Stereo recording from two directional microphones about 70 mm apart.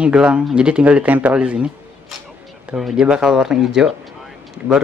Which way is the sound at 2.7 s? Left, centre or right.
Centre.